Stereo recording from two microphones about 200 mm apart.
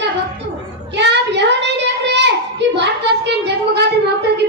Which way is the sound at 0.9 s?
60° right (ahead or behind).